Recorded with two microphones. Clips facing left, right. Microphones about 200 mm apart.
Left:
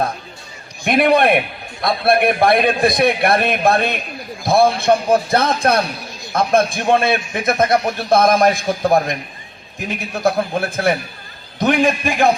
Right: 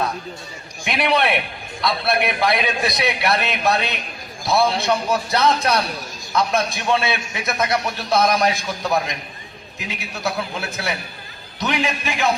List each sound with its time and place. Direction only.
0.9 s a man's voice: 50° left (ahead or behind)